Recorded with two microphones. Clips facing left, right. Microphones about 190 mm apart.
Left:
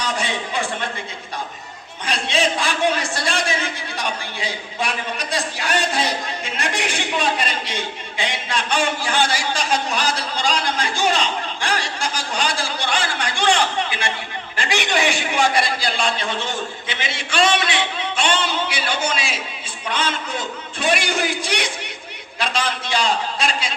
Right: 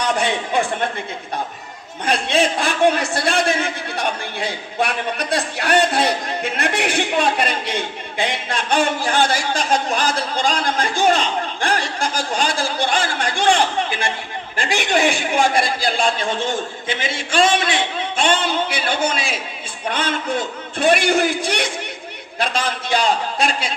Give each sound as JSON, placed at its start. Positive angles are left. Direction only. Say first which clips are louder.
{"t": 0.0, "sound": "a man's voice", "louder": "right 5 dB", "side_deg": -55}
{"t": 2.0, "sound": "a man's voice", "louder": "right 3 dB", "side_deg": -55}